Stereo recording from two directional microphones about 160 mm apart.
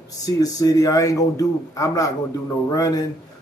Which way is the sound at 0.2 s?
20° left (ahead or behind).